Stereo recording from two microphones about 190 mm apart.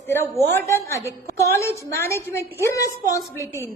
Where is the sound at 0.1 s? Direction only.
10° left (ahead or behind).